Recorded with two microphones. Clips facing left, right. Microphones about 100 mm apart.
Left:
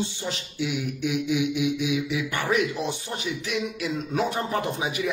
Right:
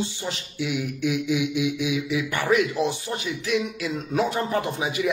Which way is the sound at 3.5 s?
25° left (ahead or behind).